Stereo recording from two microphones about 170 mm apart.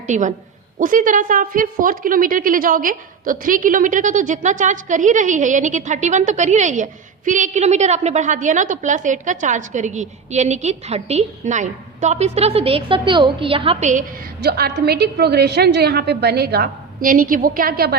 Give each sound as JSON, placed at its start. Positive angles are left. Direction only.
{"t": 0.1, "sound": "a woman's voice", "side_deg": -45}
{"t": 14.4, "sound": "a woman's voice", "side_deg": -70}